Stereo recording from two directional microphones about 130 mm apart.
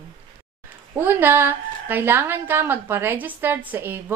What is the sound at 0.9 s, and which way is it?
A woman's voice, 15° right (ahead or behind).